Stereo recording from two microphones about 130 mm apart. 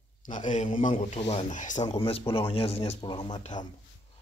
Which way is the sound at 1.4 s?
75° left (ahead or behind).